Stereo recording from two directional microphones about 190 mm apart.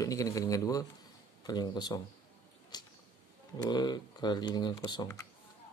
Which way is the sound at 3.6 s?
20° left (ahead or behind).